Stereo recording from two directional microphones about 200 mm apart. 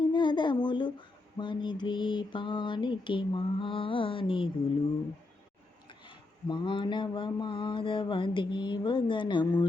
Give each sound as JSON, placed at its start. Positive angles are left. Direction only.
{"t": 0.1, "sound": "speech", "side_deg": 25}
{"t": 5.9, "sound": "speech", "side_deg": 25}